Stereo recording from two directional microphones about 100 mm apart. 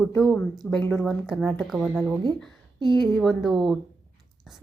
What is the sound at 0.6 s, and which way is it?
Speech, 10° left (ahead or behind).